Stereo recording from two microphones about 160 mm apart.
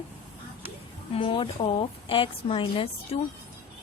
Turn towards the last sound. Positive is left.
turn(degrees=35)  # may be behind; listen again after turning